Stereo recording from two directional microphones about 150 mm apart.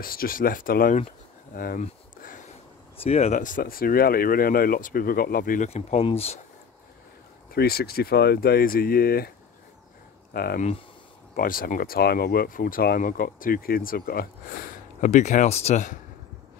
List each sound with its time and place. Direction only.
0.0 s speech: 75° left (ahead or behind)
1.5 s a sound: 70° left (ahead or behind)
3.0 s speech: 45° left (ahead or behind); by 5.7 s 70° left (ahead or behind)
5.7 s speech: 45° left (ahead or behind)
7.5 s speech: 90° left
10.3 s speech: 90° left
11.3 s speech: 70° left (ahead or behind)
15.0 s speech: 50° left (ahead or behind)